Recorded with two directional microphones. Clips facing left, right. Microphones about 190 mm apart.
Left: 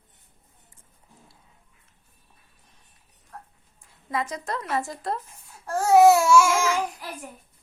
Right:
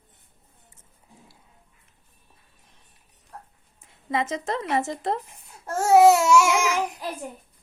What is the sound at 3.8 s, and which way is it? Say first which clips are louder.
Speech: right 3 dB; 25° right (ahead or behind).